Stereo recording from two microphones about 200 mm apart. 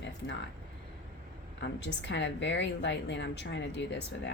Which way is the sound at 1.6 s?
60° left (ahead or behind).